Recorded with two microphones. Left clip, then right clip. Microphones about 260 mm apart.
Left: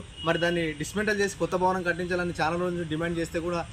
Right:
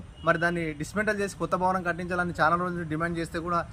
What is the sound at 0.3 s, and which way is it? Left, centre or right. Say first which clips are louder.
A man's voice: left 1 dB; centre.